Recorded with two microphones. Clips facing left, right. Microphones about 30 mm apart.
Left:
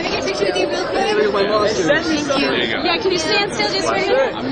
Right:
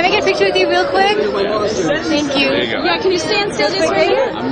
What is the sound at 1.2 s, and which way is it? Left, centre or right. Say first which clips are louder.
Speech: even; left.